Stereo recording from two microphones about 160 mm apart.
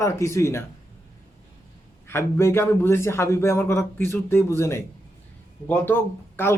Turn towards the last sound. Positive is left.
turn(degrees=15)  # may be behind; listen again after turning